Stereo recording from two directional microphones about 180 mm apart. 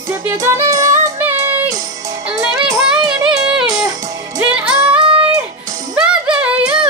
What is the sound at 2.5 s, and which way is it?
Child singing, 5° right (ahead or behind).